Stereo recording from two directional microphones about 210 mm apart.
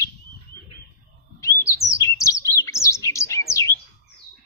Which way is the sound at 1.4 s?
15° left (ahead or behind).